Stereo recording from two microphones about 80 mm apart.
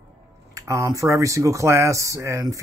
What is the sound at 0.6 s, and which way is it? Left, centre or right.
Speech, right.